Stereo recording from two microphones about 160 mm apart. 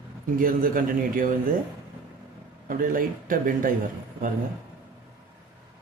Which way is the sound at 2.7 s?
60° right (ahead or behind).